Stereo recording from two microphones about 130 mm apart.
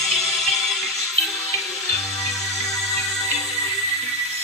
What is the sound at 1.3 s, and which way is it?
Music, 25° left (ahead or behind).